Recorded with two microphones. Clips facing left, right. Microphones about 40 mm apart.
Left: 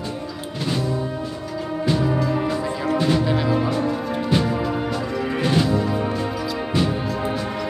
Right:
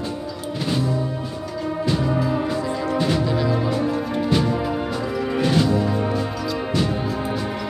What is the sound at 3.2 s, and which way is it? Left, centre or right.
Music, centre.